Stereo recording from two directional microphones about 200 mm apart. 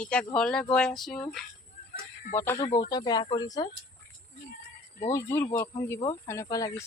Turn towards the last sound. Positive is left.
turn(degrees=15)  # may be behind; listen again after turning